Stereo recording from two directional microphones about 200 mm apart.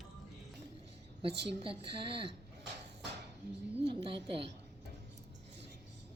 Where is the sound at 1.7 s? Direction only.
25° right (ahead or behind).